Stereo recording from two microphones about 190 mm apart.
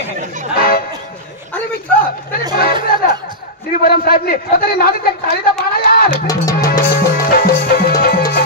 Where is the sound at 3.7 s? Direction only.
50° left (ahead or behind).